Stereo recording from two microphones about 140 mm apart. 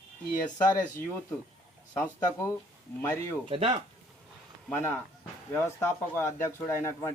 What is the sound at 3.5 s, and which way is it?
Speech, 40° right (ahead or behind).